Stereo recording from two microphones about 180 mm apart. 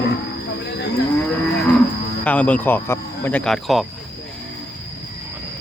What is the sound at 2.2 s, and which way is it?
Speech, 5° left (ahead or behind).